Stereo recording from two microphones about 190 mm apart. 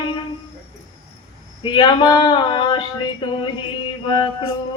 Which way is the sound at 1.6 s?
25° left (ahead or behind).